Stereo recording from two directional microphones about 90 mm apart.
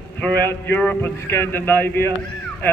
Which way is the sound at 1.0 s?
30° left (ahead or behind).